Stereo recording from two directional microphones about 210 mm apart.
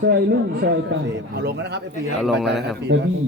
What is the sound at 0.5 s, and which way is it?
A man's voice, 50° right (ahead or behind).